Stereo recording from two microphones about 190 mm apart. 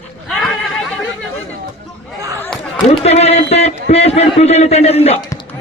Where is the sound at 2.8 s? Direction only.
35° left (ahead or behind).